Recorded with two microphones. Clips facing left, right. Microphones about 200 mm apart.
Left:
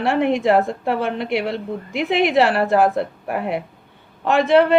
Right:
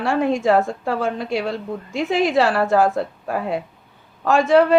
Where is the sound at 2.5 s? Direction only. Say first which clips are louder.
Left 1 dB; 20° left (ahead or behind).